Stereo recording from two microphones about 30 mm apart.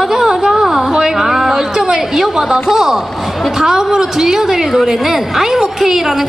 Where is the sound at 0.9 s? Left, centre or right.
Right.